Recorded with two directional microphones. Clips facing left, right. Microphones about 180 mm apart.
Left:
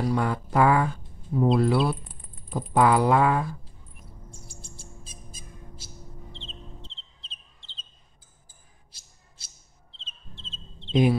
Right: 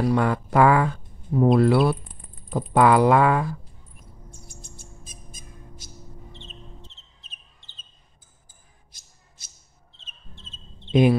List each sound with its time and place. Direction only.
0.1 s speech: 75° right (ahead or behind)
1.3 s speech: 60° right (ahead or behind); by 3.4 s 75° right (ahead or behind)
4.3 s bird: 30° left (ahead or behind)
10.9 s speech: 70° right (ahead or behind)